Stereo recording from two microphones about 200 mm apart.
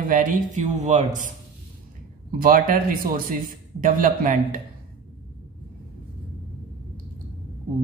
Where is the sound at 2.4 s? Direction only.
45° right (ahead or behind).